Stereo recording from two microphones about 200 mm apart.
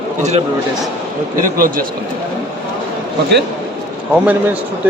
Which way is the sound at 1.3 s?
45° right (ahead or behind).